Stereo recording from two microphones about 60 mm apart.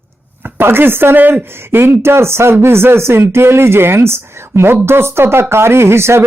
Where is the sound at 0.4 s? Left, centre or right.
Right.